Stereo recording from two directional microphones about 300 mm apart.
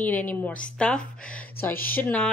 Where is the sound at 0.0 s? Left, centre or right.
Centre.